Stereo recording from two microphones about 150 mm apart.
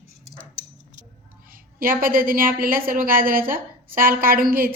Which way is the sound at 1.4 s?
70° right (ahead or behind).